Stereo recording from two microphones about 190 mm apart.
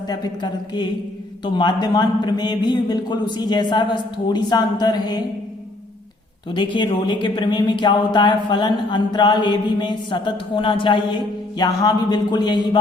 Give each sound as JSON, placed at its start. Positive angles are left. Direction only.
{"t": 0.1, "sound": "speech", "side_deg": 20}
{"t": 6.5, "sound": "speech", "side_deg": 25}